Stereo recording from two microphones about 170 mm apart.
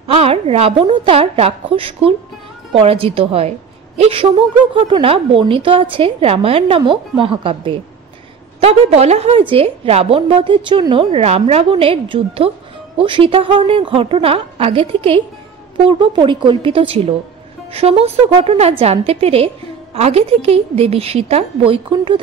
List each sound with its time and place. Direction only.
0.1 s a woman's voice: 35° right (ahead or behind)